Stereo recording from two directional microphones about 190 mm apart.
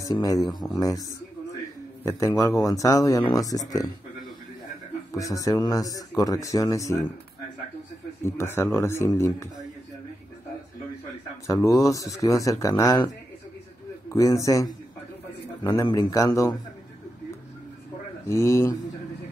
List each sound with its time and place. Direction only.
0.0 s speech: 20° left (ahead or behind)
0.4 s speech: centre (ahead or behind)
0.7 s speech: 20° left (ahead or behind)
2.0 s speech: 15° left (ahead or behind)
5.1 s speech: 15° left (ahead or behind)
8.4 s speech: 15° left (ahead or behind)
11.4 s speech: 15° left (ahead or behind)
18.2 s speech: 15° left (ahead or behind)